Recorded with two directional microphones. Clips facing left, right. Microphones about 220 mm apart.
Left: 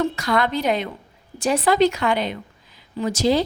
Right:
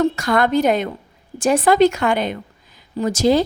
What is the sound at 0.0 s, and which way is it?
A woman's voice, 45° right (ahead or behind).